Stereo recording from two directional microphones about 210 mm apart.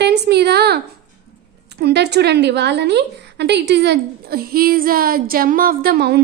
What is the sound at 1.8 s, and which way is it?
A woman's voice, 55° right (ahead or behind).